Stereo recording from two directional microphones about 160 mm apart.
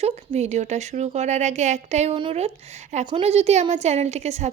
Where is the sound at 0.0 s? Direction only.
45° right (ahead or behind).